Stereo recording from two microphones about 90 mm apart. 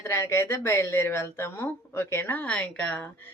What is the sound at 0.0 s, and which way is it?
Speech, 30° left (ahead or behind).